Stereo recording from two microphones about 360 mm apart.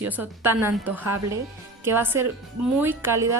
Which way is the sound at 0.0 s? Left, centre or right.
Centre.